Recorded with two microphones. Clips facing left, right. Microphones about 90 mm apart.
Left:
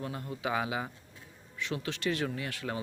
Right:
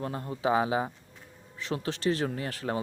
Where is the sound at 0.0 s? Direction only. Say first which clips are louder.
Right 5 dB; 35° right (ahead or behind).